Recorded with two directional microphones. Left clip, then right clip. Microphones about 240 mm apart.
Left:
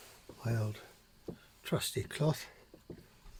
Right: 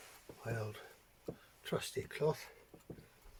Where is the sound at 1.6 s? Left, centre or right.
Left.